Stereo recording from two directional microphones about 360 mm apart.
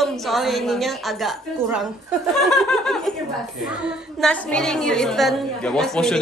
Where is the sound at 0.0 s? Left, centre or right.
Centre.